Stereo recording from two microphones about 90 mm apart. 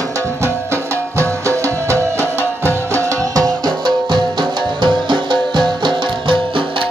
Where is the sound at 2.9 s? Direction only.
35° right (ahead or behind).